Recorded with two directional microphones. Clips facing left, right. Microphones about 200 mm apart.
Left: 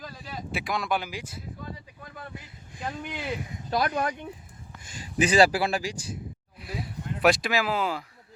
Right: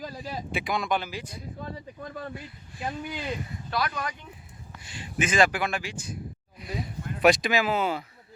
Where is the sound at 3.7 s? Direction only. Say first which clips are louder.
Left 4 dB; 45° left (ahead or behind).